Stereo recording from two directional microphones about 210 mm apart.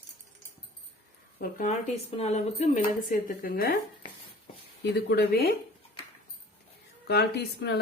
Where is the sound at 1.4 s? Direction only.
40° left (ahead or behind).